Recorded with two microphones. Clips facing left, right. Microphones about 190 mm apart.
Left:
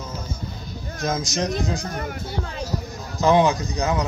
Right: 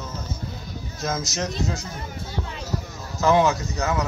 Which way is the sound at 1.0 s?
15° left (ahead or behind).